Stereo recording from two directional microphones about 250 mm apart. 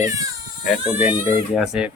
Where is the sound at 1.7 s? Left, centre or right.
Centre.